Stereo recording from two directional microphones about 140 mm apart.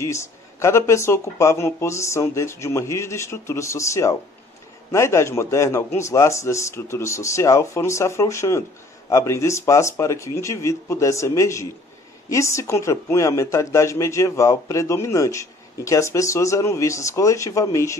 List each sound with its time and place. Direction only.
0.0 s speech: 20° left (ahead or behind)